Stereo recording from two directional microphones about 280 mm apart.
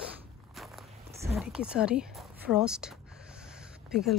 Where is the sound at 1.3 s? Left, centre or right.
Centre.